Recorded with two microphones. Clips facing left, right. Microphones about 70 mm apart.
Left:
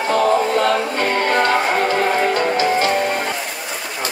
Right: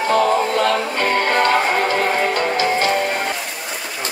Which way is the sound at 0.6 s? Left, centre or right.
Left.